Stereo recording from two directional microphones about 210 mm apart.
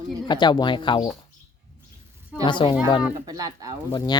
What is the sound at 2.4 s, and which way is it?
Speech, 25° left (ahead or behind).